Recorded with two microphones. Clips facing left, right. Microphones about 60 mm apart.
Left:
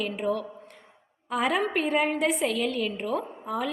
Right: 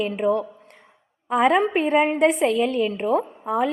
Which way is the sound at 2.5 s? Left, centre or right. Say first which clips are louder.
Right 7 dB; right.